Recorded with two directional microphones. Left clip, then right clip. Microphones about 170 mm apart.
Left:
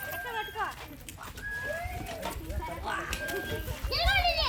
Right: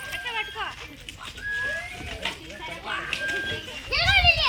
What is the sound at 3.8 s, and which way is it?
Children playing, 15° left (ahead or behind).